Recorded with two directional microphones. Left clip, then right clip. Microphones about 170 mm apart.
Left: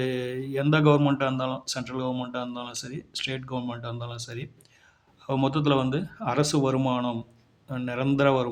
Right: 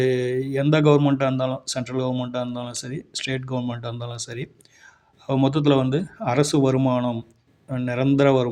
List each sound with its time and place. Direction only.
0.0 s speech: 25° right (ahead or behind)